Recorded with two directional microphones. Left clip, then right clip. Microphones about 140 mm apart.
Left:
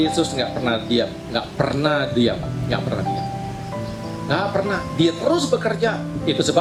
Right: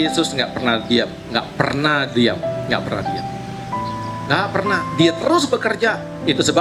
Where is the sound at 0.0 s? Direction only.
30° right (ahead or behind).